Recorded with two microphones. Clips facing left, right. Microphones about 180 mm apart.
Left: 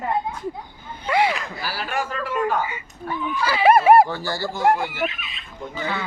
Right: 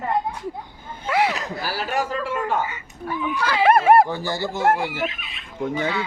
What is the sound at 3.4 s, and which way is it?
Speech, 5° left (ahead or behind).